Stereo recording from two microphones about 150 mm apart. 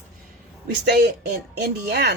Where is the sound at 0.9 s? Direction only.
90° right.